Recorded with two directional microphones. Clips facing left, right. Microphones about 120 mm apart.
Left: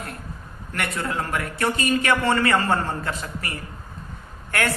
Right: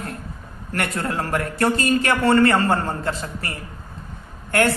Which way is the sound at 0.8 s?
40° right (ahead or behind).